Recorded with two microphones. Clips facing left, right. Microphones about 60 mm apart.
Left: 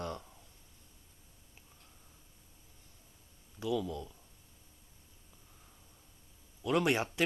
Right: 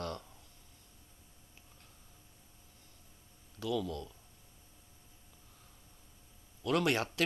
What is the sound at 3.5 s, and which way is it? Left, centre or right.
Speech, centre.